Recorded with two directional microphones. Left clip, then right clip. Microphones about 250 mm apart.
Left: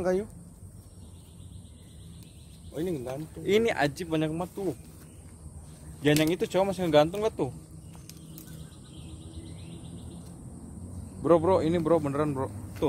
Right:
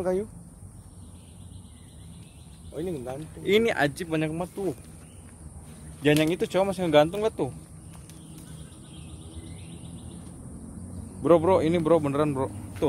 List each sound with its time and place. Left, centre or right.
0.0 s speech: left
2.7 s speech: left
3.4 s speech: centre
6.0 s speech: centre
11.2 s a man's voice: centre